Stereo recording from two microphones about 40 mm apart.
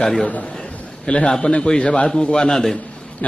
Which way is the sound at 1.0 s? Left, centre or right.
Left.